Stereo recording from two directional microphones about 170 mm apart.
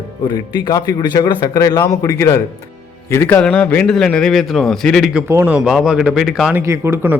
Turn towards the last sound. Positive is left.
turn(degrees=-15)  # may be behind; listen again after turning